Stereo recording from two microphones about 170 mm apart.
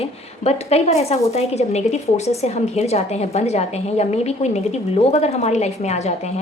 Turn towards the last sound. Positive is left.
turn(degrees=40)  # may be behind; listen again after turning